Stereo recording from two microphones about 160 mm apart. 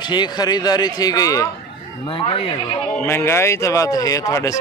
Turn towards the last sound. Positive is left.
turn(degrees=20)  # may be behind; listen again after turning